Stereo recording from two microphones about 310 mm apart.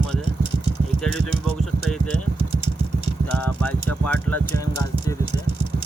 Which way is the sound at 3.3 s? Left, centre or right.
Centre.